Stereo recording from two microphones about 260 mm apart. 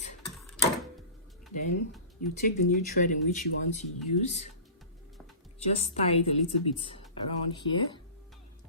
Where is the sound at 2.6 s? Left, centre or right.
Left.